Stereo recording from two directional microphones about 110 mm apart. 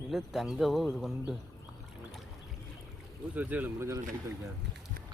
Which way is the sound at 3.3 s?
15° right (ahead or behind).